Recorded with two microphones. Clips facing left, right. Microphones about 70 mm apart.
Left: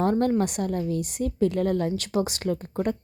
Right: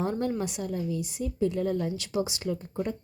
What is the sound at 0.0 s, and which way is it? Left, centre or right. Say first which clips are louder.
A woman's voice: left 7 dB; left.